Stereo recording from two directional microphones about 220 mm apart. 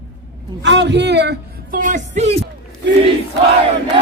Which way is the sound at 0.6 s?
55° right (ahead or behind).